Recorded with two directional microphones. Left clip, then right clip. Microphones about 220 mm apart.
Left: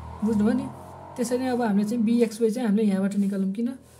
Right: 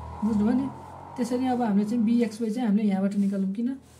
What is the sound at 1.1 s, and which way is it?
A woman's voice, 40° left (ahead or behind).